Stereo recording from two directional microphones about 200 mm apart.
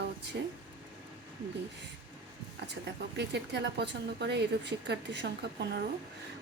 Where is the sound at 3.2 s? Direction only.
60° right (ahead or behind).